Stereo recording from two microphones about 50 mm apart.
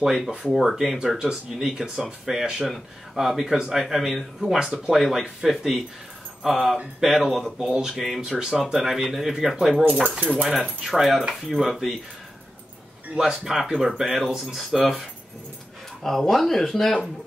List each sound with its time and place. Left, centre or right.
0.0 s speech: centre
3.8 s speech: centre
8.5 s speech: centre
13.2 s speech: centre
16.0 s speech: centre